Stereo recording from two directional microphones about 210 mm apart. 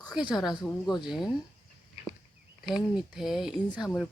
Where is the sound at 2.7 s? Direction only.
5° right (ahead or behind).